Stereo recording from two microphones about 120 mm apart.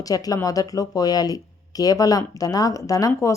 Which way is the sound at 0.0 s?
30° left (ahead or behind).